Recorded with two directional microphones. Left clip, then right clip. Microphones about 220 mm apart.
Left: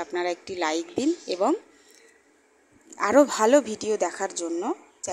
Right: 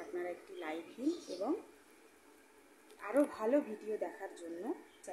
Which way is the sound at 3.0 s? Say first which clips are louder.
Left 15 dB; 40° left (ahead or behind).